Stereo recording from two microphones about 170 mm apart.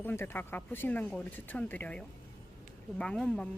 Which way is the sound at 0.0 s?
10° left (ahead or behind).